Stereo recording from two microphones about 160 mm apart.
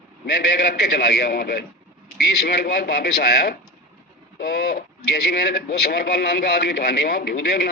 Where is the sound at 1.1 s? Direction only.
70° left (ahead or behind).